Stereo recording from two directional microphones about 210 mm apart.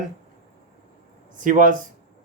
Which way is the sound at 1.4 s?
40° right (ahead or behind).